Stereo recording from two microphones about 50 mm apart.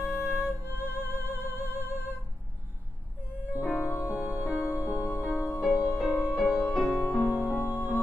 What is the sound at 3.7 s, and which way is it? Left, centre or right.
Music, left.